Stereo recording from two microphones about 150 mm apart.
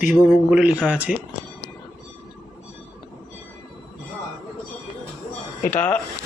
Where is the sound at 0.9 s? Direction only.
10° right (ahead or behind).